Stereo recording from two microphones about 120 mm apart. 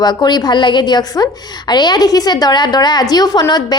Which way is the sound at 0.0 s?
35° left (ahead or behind).